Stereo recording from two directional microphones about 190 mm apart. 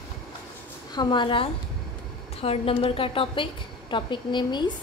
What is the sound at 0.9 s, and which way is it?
A woman's voice, 25° left (ahead or behind).